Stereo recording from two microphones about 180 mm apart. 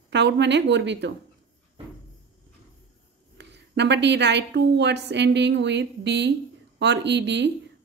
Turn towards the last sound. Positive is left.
turn(degrees=-75)  # may be behind; listen again after turning